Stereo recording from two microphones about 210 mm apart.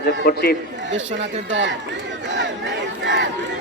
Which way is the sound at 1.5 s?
60° right (ahead or behind).